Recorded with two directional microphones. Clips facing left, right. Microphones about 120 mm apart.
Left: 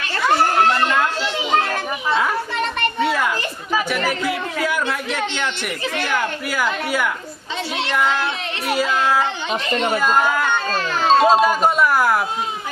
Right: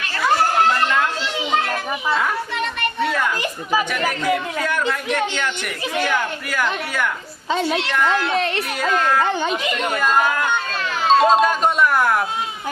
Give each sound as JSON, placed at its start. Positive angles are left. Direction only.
{"t": 3.0, "sound": "children playing", "side_deg": 5}
{"t": 3.9, "sound": "a woman's voice", "side_deg": 5}
{"t": 6.0, "sound": "a woman's voice", "side_deg": 5}
{"t": 9.5, "sound": "a child's voice", "side_deg": 25}
{"t": 9.9, "sound": "a woman's voice", "side_deg": 5}
{"t": 10.7, "sound": "music", "side_deg": 35}
{"t": 11.3, "sound": "a sound", "side_deg": 5}